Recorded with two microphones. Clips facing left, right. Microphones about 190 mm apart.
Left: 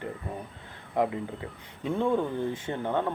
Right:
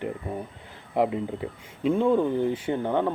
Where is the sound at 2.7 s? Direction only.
20° right (ahead or behind).